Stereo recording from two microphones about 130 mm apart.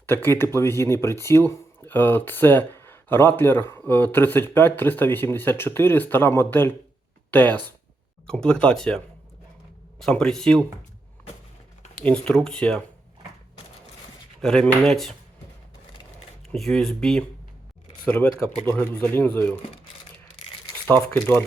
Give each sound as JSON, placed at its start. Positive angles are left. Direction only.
{"t": 0.0, "sound": "speech", "side_deg": 15}
{"t": 10.0, "sound": "speech", "side_deg": 5}
{"t": 11.9, "sound": "speech", "side_deg": 10}
{"t": 14.4, "sound": "speech", "side_deg": 5}
{"t": 16.5, "sound": "speech", "side_deg": 5}
{"t": 20.8, "sound": "speech", "side_deg": 15}